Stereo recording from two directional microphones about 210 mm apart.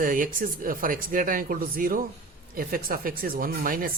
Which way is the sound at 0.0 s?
40° right (ahead or behind).